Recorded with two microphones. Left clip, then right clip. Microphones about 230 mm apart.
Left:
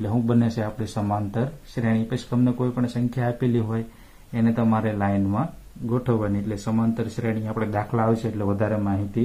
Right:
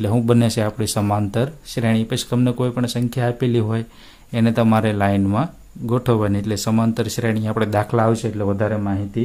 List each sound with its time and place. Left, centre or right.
0.0 s speech: right